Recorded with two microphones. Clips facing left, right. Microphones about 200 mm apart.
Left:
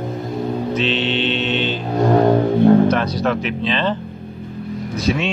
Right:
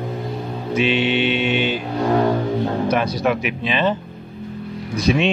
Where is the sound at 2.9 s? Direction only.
10° right (ahead or behind).